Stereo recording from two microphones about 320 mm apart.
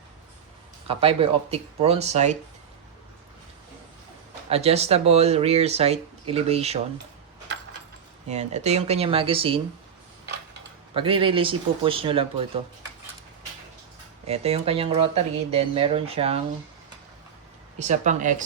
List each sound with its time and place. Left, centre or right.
0.9 s speech: centre
4.4 s speech: centre
7.5 s keys jangling: right
8.3 s speech: right
10.9 s speech: centre
14.3 s speech: centre
17.7 s speech: right